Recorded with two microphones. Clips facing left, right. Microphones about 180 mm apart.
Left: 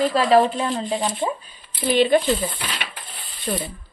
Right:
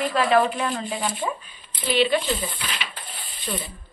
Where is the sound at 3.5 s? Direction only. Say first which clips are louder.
Left 5 dB; 50° left (ahead or behind).